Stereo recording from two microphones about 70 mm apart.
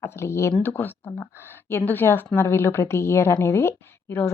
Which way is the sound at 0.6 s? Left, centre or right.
Left.